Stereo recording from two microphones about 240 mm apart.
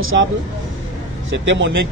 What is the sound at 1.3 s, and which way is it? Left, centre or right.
Speech, right.